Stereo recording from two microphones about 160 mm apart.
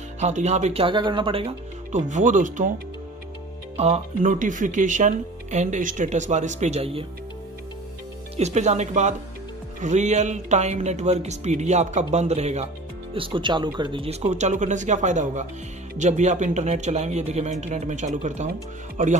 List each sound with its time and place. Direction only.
0.2 s speech: 45° right (ahead or behind)
1.9 s speech: 50° right (ahead or behind)
3.7 s speech: 40° right (ahead or behind)
8.4 s speech: 45° right (ahead or behind)
13.1 s speech: 35° right (ahead or behind); by 19.1 s 55° right (ahead or behind)